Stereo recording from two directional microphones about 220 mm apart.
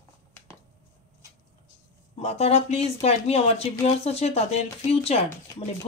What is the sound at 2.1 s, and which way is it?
Speech, 30° left (ahead or behind).